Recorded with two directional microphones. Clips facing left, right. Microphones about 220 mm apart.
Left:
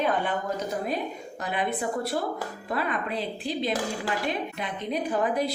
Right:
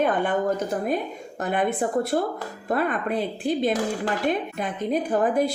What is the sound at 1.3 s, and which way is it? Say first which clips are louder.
A woman's voice: right 6 dB; 50° right (ahead or behind).